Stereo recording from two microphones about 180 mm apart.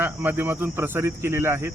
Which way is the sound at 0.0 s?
10° right (ahead or behind).